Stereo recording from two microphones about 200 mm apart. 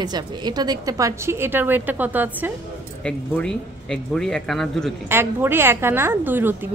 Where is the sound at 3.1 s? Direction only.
5° left (ahead or behind).